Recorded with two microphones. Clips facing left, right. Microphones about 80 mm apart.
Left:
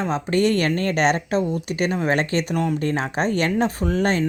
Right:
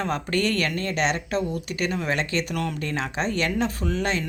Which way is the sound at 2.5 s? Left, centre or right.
Centre.